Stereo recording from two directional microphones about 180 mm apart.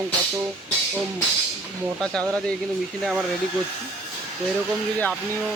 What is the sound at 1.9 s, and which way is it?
Speech, 5° left (ahead or behind).